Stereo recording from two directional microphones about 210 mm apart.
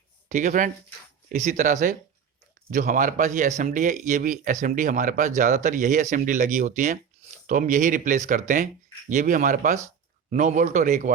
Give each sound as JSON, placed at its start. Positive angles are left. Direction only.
{"t": 0.3, "sound": "speech", "side_deg": -35}